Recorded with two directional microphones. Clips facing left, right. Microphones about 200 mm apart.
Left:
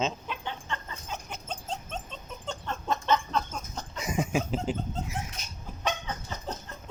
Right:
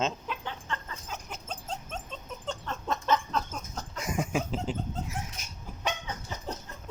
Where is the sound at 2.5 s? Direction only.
Centre (ahead or behind).